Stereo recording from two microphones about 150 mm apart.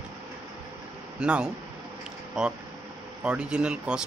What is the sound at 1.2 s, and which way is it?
Speech, 5° right (ahead or behind).